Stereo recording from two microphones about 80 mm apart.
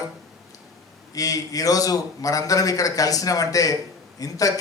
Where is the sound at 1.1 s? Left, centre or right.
Left.